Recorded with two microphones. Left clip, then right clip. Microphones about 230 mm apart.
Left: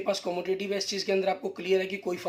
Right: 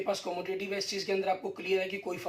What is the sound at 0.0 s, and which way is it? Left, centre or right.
Speech, left.